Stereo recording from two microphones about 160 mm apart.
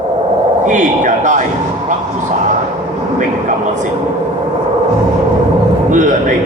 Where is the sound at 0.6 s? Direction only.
50° right (ahead or behind).